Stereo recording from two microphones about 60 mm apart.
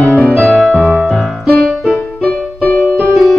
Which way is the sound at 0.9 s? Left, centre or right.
Centre.